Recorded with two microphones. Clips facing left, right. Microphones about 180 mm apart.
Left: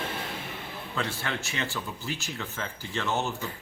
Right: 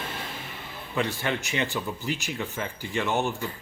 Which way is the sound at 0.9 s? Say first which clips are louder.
Right 5 dB; 15° right (ahead or behind).